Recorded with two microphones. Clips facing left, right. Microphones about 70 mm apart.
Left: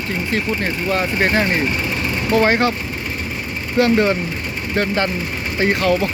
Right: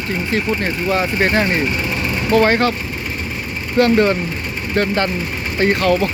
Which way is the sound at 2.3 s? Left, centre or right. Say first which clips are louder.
Right 2 dB; centre.